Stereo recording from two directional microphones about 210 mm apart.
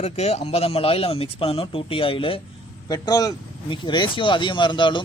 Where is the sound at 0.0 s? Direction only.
30° left (ahead or behind).